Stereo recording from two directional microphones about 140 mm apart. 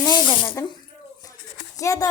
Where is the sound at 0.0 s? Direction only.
30° left (ahead or behind).